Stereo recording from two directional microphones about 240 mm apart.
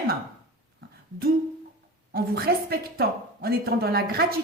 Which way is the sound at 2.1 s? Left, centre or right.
Right.